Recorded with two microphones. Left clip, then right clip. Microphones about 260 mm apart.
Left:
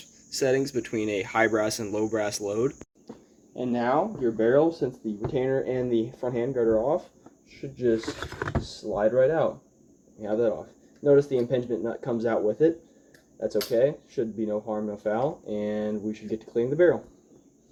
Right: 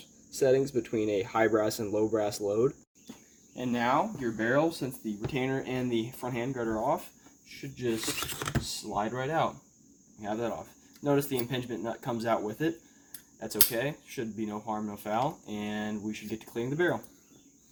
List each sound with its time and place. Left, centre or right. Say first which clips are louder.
0.3 s speech: left 1 dB; centre
3.6 s speech: left 3 dB; right
8.2 s speech: left 2 dB; right
8.6 s speech: left 10 dB; right